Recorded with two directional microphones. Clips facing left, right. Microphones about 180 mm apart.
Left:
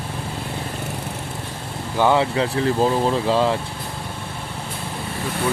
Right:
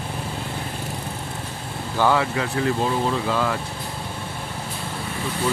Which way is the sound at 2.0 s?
20° left (ahead or behind).